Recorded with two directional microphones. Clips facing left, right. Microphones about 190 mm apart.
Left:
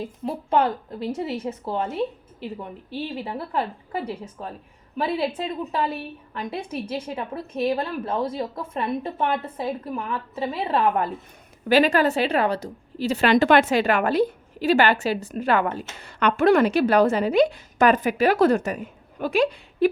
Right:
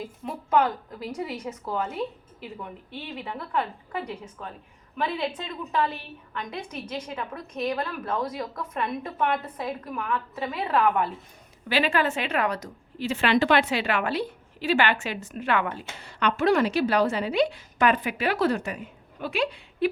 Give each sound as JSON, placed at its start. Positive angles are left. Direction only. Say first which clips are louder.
{"t": 0.0, "sound": "a woman's voice", "louder": "left 5 dB", "side_deg": 30}
{"t": 16.0, "sound": "a woman's voice", "louder": "left 4 dB", "side_deg": 50}